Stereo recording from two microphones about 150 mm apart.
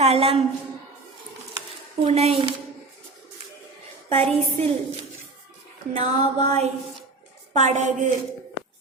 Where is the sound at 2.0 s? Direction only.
40° right (ahead or behind).